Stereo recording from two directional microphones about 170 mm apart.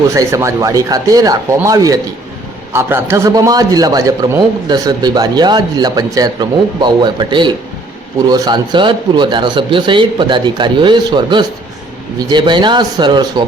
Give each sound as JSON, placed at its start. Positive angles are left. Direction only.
{"t": 0.1, "sound": "a man's voice", "side_deg": -20}